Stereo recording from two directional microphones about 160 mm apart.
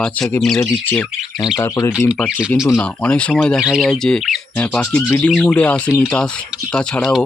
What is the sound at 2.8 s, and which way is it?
Speech, 5° left (ahead or behind).